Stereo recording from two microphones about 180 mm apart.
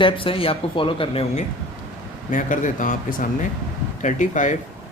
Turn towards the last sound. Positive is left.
turn(degrees=45)  # may be behind; listen again after turning